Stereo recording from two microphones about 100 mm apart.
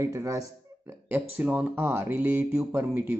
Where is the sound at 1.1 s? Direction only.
15° right (ahead or behind).